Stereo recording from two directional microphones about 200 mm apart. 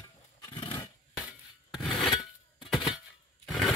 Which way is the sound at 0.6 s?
20° left (ahead or behind).